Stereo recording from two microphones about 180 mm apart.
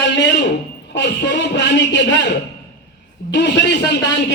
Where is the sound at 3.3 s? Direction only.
75° left (ahead or behind).